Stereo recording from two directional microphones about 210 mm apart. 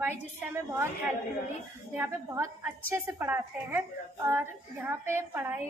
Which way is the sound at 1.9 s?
10° right (ahead or behind).